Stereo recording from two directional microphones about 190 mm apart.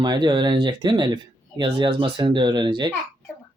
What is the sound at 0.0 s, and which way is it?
Speech, 20° right (ahead or behind).